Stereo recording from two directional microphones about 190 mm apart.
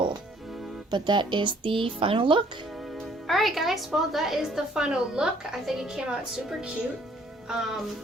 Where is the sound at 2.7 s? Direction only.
Centre (ahead or behind).